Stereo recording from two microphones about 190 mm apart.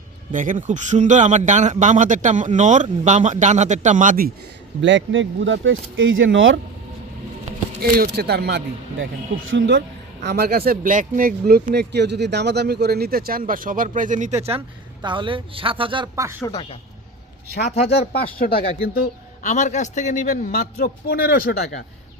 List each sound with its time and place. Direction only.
0.3 s speech: 40° right (ahead or behind)
4.8 s speech: 80° right
7.8 s speech: 55° right (ahead or behind)
9.5 s speech: 70° right (ahead or behind)
10.2 s speech: 55° right (ahead or behind); by 16.4 s 15° right (ahead or behind)
17.9 s speech: 55° left (ahead or behind)
19.0 s a man's voice: 40° left (ahead or behind)
20.5 s speech: 55° left (ahead or behind)